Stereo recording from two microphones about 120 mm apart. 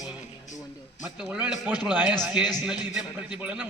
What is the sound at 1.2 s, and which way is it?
A man's voice, 10° right (ahead or behind).